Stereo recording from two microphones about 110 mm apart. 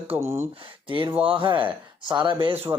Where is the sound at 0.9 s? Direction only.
50° right (ahead or behind).